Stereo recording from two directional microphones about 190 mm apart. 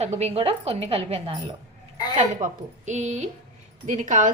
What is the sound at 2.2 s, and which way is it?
A woman's voice, 40° right (ahead or behind).